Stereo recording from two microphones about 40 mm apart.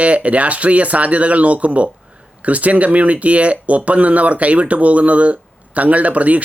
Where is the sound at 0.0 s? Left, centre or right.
Right.